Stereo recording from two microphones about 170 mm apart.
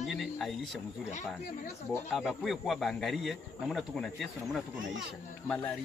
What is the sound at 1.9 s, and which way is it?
Speech, centre (ahead or behind).